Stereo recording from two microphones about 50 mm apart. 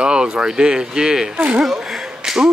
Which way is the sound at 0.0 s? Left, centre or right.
Centre.